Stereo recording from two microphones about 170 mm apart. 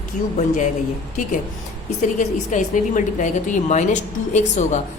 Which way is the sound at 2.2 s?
50° left (ahead or behind).